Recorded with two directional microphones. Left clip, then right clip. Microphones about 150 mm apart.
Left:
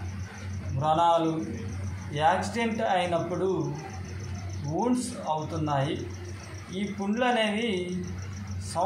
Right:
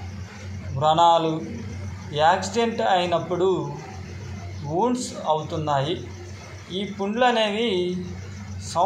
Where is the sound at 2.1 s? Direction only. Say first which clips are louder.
Right 5 dB; 20° right (ahead or behind).